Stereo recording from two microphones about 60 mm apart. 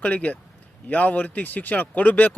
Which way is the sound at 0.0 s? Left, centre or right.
Left.